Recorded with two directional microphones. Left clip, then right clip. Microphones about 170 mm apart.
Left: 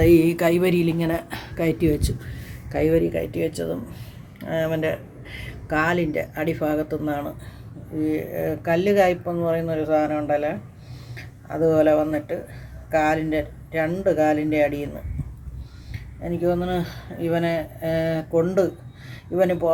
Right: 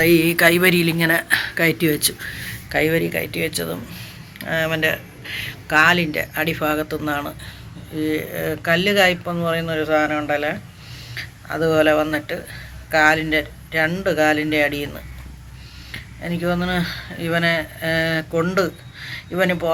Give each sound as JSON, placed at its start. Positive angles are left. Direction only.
{"t": 0.0, "sound": "a woman's voice", "side_deg": 20}
{"t": 11.1, "sound": "a sound", "side_deg": 10}
{"t": 11.7, "sound": "a woman's voice", "side_deg": 10}
{"t": 16.2, "sound": "a woman's voice", "side_deg": 5}